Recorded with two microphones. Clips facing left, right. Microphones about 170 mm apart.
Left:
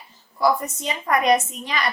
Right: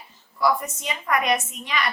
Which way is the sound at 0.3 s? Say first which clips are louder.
Left 2 dB; 35° left (ahead or behind).